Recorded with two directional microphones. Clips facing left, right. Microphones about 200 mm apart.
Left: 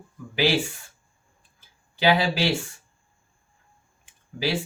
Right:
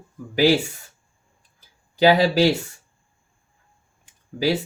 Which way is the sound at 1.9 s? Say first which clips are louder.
Right 6 dB; 40° right (ahead or behind).